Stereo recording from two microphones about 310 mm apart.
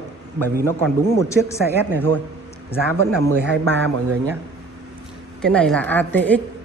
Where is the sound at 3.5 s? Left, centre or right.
Right.